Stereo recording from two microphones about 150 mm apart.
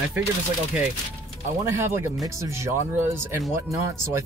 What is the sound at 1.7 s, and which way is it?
Speech, 15° right (ahead or behind).